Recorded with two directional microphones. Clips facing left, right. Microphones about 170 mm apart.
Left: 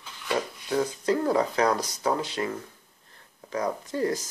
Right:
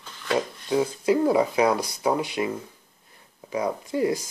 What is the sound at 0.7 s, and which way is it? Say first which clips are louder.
Speech: right 3 dB; 10° right (ahead or behind).